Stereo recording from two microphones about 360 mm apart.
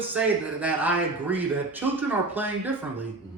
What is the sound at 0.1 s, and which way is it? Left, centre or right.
A man's voice, centre.